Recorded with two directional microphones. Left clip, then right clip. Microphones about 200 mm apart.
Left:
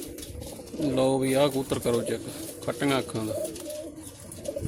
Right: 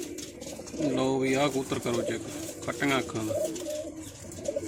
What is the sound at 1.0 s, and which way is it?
Speech, 55° left (ahead or behind).